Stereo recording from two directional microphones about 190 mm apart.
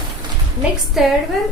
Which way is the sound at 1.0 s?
Centre (ahead or behind).